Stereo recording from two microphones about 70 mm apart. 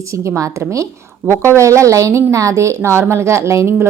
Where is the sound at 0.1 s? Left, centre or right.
Right.